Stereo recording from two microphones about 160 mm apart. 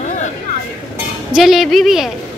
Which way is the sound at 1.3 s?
Centre (ahead or behind).